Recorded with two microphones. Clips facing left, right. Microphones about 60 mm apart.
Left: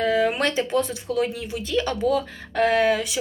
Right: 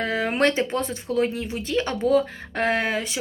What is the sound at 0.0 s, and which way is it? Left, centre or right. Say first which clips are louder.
Speech: left 1 dB; right.